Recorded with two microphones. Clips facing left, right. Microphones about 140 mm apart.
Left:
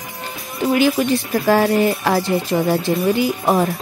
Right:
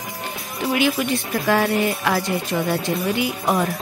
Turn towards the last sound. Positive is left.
turn(degrees=35)  # may be behind; listen again after turning